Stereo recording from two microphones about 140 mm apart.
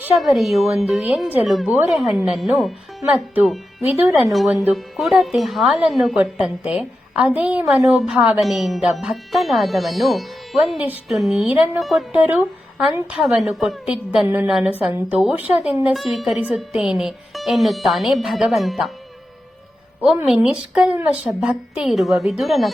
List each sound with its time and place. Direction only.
0.2 s a woman's voice: centre (ahead or behind)
12.2 s a woman's voice: 10° right (ahead or behind)
20.0 s speech: 5° right (ahead or behind)